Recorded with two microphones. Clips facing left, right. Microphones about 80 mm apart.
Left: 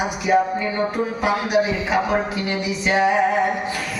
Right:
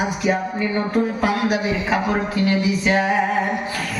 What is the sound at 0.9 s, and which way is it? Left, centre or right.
Speech, centre.